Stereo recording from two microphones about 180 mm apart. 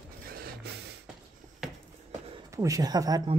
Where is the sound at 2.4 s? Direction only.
15° right (ahead or behind).